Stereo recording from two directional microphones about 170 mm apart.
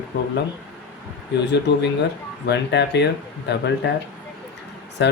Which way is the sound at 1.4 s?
90° left.